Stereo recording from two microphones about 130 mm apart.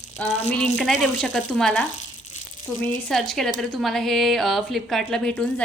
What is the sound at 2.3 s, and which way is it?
Crumpling, 70° left (ahead or behind).